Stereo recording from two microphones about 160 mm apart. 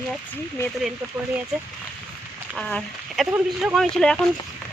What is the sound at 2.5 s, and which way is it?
Speech, 5° left (ahead or behind).